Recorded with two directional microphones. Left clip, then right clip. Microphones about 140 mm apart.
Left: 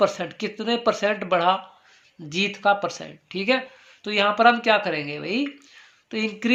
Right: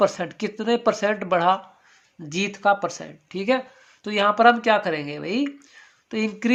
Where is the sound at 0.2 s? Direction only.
35° right (ahead or behind).